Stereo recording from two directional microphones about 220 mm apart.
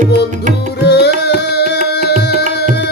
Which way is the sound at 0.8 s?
50° left (ahead or behind).